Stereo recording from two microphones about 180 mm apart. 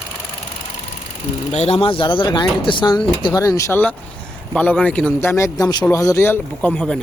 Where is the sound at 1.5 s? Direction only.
35° left (ahead or behind); by 6.9 s 5° left (ahead or behind).